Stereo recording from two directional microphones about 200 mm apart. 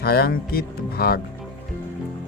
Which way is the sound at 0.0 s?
50° left (ahead or behind).